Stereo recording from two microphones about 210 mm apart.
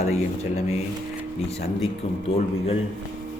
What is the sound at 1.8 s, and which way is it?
Speech, 30° left (ahead or behind).